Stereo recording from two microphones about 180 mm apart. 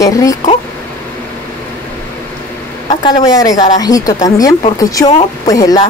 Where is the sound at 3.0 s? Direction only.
25° left (ahead or behind).